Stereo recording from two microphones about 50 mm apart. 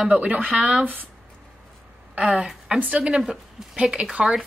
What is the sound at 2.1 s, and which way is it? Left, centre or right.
Speech, right.